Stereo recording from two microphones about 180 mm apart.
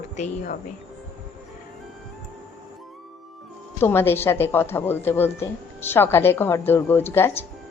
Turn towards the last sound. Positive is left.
turn(degrees=10)  # may be behind; listen again after turning